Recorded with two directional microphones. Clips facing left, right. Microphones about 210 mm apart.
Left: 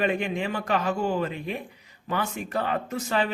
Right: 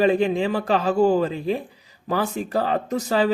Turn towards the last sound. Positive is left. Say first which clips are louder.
# right 6 dB
turn(degrees=-35)  # may be behind; listen again after turning